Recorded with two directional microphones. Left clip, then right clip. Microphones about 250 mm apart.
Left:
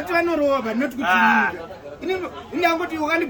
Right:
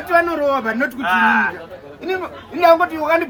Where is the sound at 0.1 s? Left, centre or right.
Centre.